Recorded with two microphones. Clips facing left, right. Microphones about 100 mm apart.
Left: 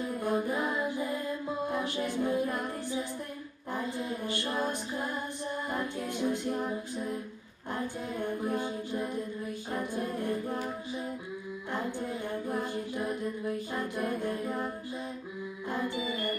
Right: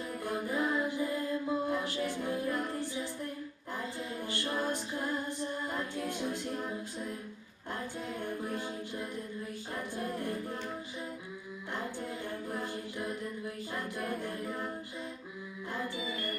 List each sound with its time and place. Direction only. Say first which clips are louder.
0.0 s music: left 6 dB; 20° left (ahead or behind)
9.7 s a capella: left 4 dB; 20° left (ahead or behind)
11.7 s music: left 4 dB; 20° left (ahead or behind)
13.7 s a capella: left 4 dB; 20° left (ahead or behind)
15.7 s music: left 4 dB; 20° left (ahead or behind)